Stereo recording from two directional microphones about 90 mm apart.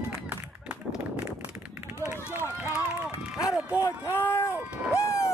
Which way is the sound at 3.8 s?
35° left (ahead or behind).